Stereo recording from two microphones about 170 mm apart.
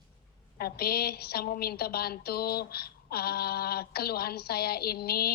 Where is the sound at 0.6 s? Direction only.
65° left (ahead or behind).